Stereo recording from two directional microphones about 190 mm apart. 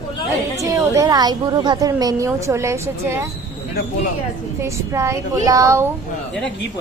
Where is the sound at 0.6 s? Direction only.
15° right (ahead or behind).